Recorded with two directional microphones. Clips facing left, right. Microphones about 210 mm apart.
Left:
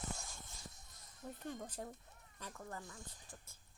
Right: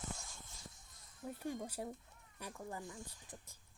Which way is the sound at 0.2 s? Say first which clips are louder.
Left 2 dB; 45° left (ahead or behind).